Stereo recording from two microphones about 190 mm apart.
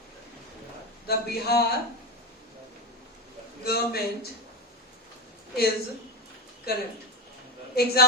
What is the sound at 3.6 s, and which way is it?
Speech, 55° left (ahead or behind).